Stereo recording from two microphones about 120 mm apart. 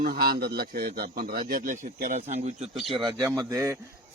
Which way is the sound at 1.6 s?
90° right.